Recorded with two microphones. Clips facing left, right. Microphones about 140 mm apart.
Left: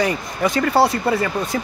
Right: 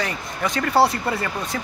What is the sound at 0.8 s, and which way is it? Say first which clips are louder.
Speech: left 1 dB; centre (ahead or behind).